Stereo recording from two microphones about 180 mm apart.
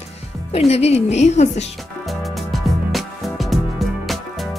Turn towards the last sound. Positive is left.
turn(degrees=0)  # may be behind; listen again after turning